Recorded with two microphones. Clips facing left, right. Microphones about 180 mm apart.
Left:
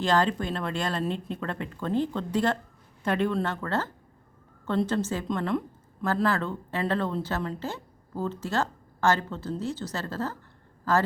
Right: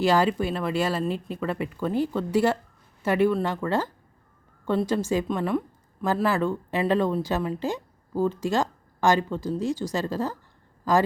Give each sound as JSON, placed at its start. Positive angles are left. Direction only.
{"t": 0.0, "sound": "a woman's voice", "side_deg": -10}